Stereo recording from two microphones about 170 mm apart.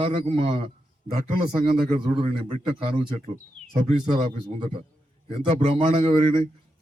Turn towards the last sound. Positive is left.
turn(degrees=-35)  # may be behind; listen again after turning